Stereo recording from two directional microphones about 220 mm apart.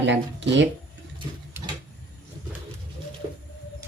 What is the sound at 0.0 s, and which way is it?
Speech, 55° right (ahead or behind).